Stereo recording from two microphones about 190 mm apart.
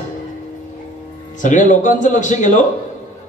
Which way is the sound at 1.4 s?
40° left (ahead or behind).